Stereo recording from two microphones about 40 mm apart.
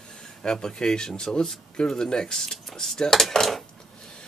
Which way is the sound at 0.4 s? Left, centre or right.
Centre.